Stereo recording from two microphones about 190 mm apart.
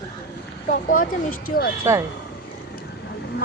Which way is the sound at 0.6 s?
45° left (ahead or behind).